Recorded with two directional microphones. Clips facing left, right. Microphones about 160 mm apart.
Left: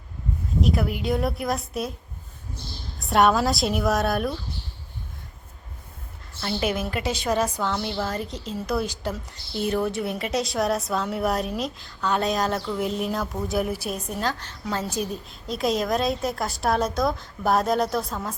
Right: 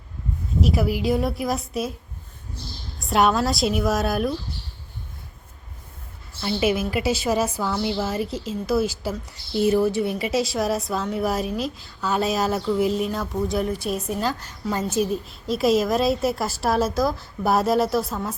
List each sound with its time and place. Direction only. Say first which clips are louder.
0.6 s a woman's voice: right 3 dB; 5° right (ahead or behind)
3.0 s a woman's voice: even; centre (ahead or behind)
6.4 s a woman's voice: right 4 dB; 5° right (ahead or behind)